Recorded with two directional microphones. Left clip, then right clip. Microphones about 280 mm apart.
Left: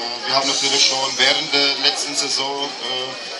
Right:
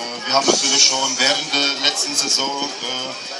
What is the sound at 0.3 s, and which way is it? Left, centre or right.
A man's voice, right.